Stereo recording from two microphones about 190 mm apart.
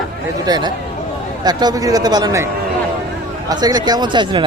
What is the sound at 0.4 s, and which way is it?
Speech, 20° right (ahead or behind).